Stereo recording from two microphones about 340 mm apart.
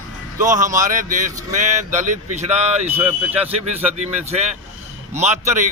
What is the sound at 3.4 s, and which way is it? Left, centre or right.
A man's voice, centre.